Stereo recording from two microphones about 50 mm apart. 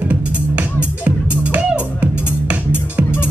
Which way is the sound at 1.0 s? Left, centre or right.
Right.